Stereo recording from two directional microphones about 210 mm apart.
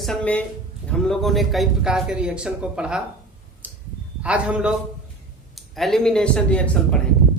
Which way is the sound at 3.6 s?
10° right (ahead or behind).